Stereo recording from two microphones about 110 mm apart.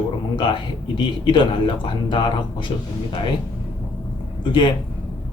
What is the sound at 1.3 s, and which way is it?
Speech, 50° left (ahead or behind).